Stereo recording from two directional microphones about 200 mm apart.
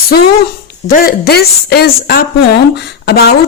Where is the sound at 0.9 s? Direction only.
50° left (ahead or behind).